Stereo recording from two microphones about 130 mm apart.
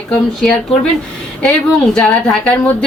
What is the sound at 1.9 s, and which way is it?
Speech, 10° left (ahead or behind).